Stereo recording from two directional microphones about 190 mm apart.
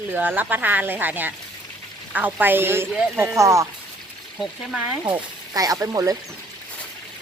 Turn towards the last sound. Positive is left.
turn(degrees=-20)  # may be behind; listen again after turning